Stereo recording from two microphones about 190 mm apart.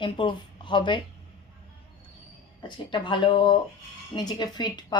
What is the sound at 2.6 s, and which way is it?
Speech, 25° left (ahead or behind).